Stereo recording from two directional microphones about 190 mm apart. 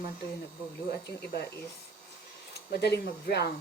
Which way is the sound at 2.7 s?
60° left (ahead or behind).